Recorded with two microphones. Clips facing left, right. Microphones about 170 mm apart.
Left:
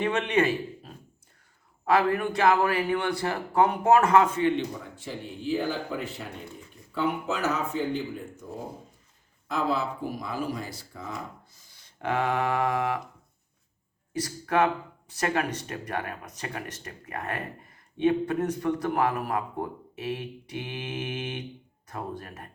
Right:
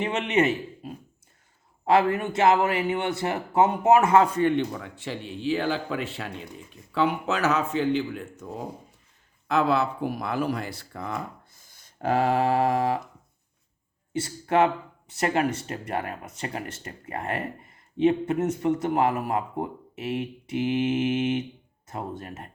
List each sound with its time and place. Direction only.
0.0 s a man's voice: 20° right (ahead or behind)
1.8 s a man's voice: 25° right (ahead or behind)
4.4 s speech: 55° right (ahead or behind); by 8.4 s 85° right
9.5 s speech: 70° right (ahead or behind)
11.6 s a sound: 45° right (ahead or behind)
14.1 s a man's voice: 25° right (ahead or behind)